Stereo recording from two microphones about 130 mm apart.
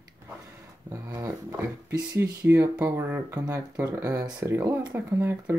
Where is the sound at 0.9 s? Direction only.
20° right (ahead or behind).